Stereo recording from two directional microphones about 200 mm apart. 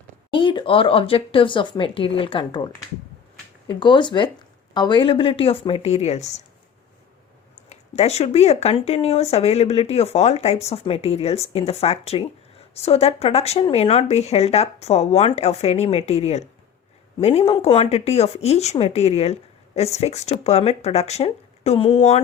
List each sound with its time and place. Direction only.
0.3 s speech: 25° left (ahead or behind)
3.7 s speech: 25° left (ahead or behind)
7.7 s speech: 30° left (ahead or behind)